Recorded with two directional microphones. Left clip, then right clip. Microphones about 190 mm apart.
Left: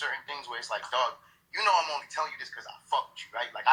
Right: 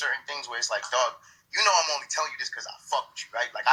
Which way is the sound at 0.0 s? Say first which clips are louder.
Right 4 dB; 30° right (ahead or behind).